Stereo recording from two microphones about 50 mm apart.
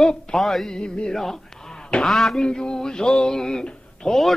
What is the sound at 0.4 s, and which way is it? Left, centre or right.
Speech, centre.